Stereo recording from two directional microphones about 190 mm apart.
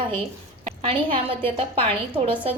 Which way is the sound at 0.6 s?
30° right (ahead or behind).